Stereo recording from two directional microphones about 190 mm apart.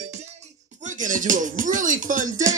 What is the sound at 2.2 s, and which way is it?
Speech, 20° right (ahead or behind).